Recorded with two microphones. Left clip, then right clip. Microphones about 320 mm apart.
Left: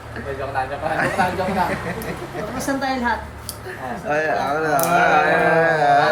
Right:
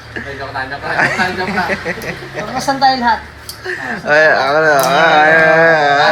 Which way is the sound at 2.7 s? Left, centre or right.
Right.